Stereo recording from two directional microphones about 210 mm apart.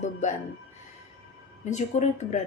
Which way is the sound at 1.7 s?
35° left (ahead or behind).